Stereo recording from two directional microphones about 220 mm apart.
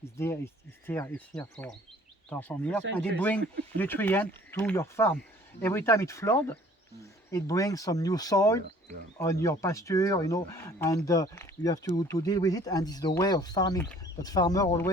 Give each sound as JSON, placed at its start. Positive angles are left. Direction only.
{"t": 0.0, "sound": "speech", "side_deg": 10}